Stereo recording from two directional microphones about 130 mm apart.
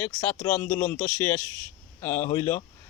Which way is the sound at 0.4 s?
15° left (ahead or behind).